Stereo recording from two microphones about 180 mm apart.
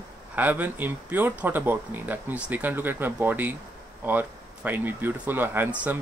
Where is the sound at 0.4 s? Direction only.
10° right (ahead or behind).